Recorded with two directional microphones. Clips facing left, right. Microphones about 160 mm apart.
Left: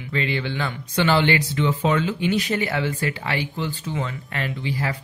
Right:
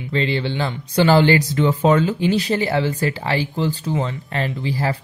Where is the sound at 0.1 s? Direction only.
30° right (ahead or behind).